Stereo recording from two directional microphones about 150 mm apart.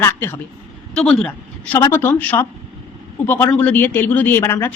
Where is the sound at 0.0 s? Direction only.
15° left (ahead or behind).